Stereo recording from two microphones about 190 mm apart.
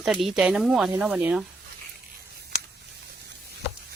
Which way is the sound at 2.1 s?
60° right (ahead or behind).